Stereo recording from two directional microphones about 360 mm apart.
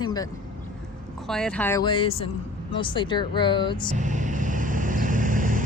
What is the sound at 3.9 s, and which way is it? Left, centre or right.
Vehicle, right.